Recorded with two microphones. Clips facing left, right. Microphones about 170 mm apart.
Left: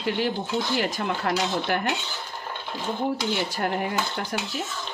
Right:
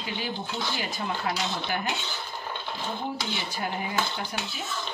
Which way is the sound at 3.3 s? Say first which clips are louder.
Left 6 dB; 60° left (ahead or behind).